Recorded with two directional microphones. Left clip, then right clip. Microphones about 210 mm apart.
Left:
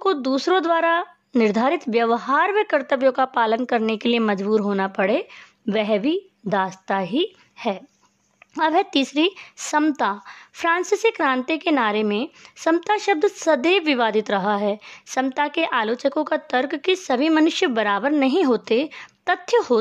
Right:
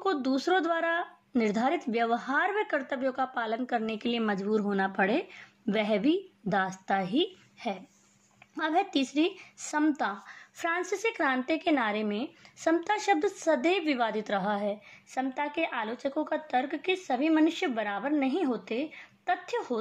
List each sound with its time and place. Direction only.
0.0 s speech: 30° left (ahead or behind); by 19.8 s 45° left (ahead or behind)